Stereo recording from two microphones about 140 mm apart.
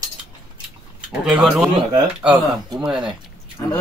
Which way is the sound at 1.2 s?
5° right (ahead or behind).